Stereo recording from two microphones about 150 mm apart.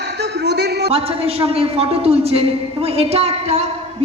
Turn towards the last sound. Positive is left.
turn(degrees=-45)  # may be behind; listen again after turning